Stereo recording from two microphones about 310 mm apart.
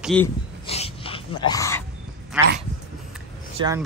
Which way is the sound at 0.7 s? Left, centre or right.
Centre.